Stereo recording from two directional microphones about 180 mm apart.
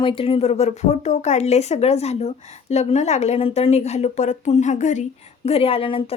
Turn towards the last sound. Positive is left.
turn(degrees=30)  # may be behind; listen again after turning